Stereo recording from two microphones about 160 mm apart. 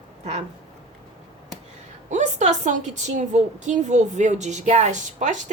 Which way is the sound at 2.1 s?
50° right (ahead or behind).